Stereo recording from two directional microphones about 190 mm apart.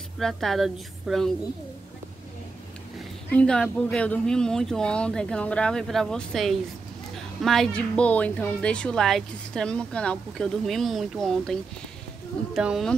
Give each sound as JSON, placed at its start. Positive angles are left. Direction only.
{"t": 0.2, "sound": "a woman's voice", "side_deg": 0}
{"t": 3.3, "sound": "a woman's voice", "side_deg": 5}
{"t": 12.5, "sound": "a woman's voice", "side_deg": 0}